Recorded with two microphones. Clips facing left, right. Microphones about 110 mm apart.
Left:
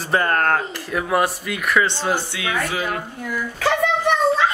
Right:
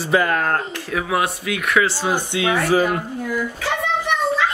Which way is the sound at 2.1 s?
25° right (ahead or behind).